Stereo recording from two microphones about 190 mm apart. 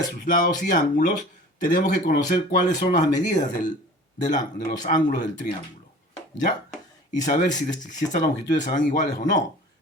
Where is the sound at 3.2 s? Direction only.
40° left (ahead or behind).